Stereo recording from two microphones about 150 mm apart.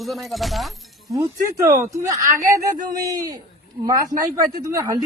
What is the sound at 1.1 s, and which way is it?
Speech, 20° right (ahead or behind).